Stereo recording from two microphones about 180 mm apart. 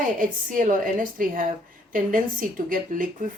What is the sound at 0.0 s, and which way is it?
Speech, 45° right (ahead or behind).